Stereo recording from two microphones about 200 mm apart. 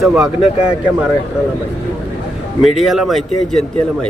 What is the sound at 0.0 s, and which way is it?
Speech, 5° right (ahead or behind).